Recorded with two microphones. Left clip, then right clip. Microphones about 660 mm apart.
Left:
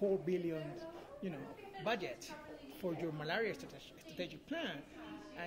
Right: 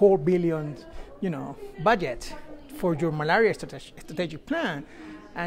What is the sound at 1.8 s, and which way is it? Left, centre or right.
Speech, right.